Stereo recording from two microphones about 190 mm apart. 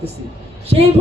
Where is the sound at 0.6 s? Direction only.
30° right (ahead or behind).